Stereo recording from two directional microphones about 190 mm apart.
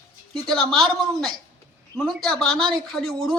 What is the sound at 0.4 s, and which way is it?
Speech, centre (ahead or behind).